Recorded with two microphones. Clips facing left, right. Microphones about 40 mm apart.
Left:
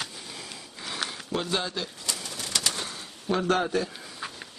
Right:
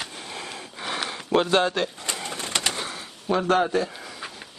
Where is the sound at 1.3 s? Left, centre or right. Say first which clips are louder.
Right 10 dB; right.